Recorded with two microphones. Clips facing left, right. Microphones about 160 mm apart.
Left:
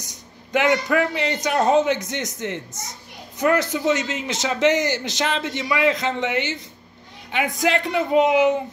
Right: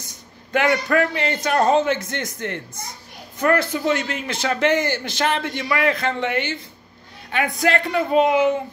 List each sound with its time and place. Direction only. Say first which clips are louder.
0.0 s a man's voice: left 1 dB; 15° left (ahead or behind)